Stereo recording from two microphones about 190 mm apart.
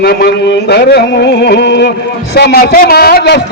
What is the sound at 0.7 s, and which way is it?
A man's voice, 60° left (ahead or behind).